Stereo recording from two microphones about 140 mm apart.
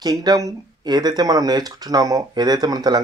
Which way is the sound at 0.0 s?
30° right (ahead or behind).